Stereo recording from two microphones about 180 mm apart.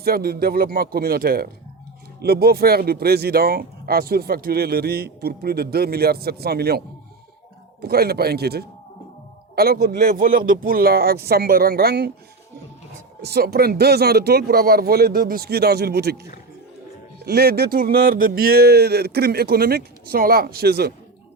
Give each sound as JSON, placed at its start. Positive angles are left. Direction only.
{"t": 0.0, "sound": "speech", "side_deg": -60}
{"t": 13.2, "sound": "speech", "side_deg": -60}
{"t": 17.2, "sound": "speech", "side_deg": -60}